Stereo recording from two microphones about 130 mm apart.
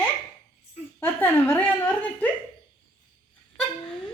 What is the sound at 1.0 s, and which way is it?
Speech, 15° left (ahead or behind).